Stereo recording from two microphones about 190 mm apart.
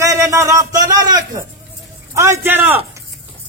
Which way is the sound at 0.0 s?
15° right (ahead or behind).